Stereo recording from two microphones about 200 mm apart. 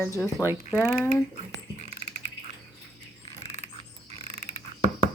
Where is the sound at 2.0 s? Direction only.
35° right (ahead or behind).